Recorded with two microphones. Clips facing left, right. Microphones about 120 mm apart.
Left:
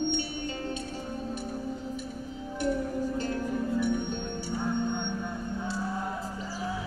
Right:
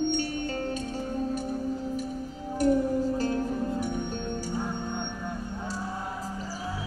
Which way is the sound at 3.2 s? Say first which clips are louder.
Right 2 dB; 35° right (ahead or behind).